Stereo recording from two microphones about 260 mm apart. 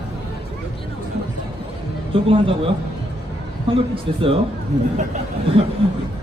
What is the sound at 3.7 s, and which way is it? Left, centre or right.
Speech, right.